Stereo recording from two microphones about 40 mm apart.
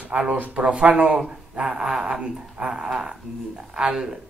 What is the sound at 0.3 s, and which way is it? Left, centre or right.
Speech, right.